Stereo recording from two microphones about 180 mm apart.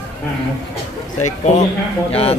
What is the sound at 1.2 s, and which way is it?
Speech, 40° left (ahead or behind).